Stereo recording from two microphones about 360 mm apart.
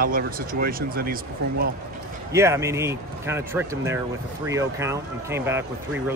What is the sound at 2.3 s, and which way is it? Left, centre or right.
Speech, centre.